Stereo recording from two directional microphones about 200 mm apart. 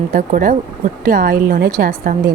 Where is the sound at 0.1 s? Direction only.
45° right (ahead or behind).